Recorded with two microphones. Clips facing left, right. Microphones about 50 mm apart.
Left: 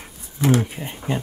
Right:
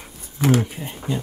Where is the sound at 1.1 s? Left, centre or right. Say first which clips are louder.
Left 1 dB; left.